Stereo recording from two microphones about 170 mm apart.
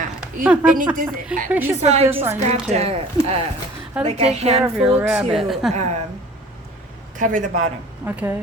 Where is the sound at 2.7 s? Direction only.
40° right (ahead or behind).